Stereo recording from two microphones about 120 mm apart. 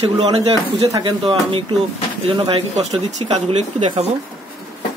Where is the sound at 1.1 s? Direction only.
40° right (ahead or behind); by 4.0 s 65° right (ahead or behind).